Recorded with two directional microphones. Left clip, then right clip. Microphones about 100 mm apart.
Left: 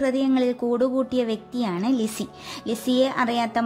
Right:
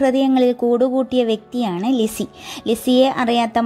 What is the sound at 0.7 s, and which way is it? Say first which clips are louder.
Speech: right 6 dB; 20° right (ahead or behind).